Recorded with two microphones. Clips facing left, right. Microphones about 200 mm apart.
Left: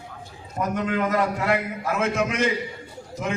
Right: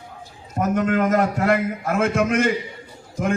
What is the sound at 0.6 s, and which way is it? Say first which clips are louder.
A man's voice: right 5 dB; 45° right (ahead or behind).